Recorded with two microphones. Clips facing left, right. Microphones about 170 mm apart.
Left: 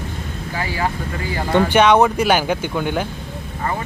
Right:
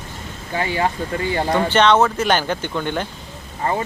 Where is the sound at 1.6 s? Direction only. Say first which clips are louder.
Left 2 dB; 10° left (ahead or behind).